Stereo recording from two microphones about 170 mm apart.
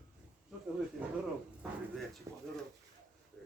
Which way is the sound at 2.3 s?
15° right (ahead or behind).